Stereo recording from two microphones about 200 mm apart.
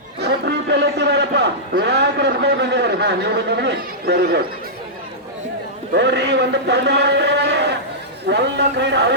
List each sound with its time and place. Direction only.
0.2 s a man's voice: 55° right (ahead or behind)
5.9 s a man's voice: 60° right (ahead or behind)